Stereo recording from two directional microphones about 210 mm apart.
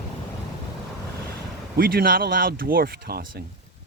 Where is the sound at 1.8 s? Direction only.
45° right (ahead or behind).